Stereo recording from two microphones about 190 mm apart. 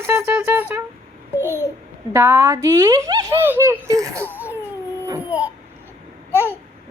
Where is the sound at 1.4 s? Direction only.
10° right (ahead or behind).